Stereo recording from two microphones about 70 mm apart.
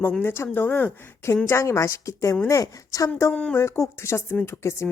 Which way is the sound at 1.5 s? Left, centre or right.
Left.